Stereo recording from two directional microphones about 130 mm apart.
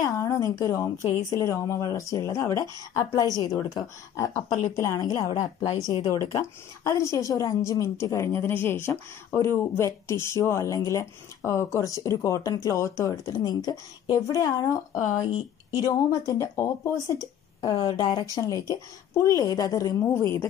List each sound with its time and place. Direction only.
0.0 s speech: 25° left (ahead or behind)